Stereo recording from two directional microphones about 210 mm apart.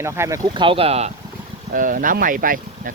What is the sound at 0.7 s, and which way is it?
Speech, 25° right (ahead or behind).